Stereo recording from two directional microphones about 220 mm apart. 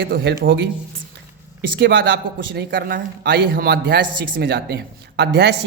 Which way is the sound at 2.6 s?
40° right (ahead or behind).